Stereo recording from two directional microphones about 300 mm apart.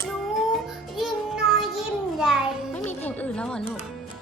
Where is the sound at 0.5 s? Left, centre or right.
Centre.